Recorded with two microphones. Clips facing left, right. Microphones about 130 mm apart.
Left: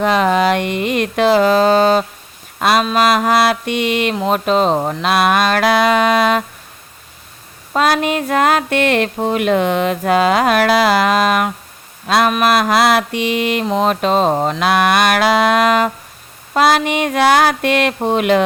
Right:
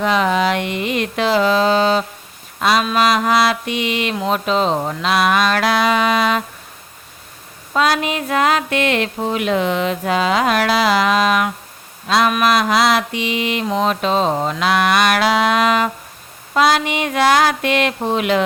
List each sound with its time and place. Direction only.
0.0 s speech: 50° left (ahead or behind)
2.6 s a sound: 50° left (ahead or behind)
2.8 s speech: 45° left (ahead or behind)
7.8 s speech: 50° left (ahead or behind)